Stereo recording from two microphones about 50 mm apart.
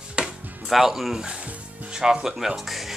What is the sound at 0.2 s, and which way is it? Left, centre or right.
Music, centre.